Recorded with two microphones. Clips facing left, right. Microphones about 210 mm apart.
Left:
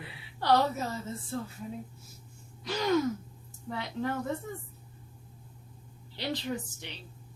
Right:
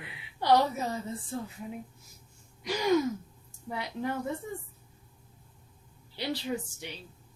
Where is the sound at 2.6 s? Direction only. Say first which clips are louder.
Right 1 dB; 15° right (ahead or behind).